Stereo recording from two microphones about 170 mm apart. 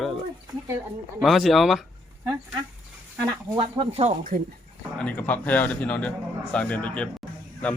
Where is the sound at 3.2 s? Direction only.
25° right (ahead or behind).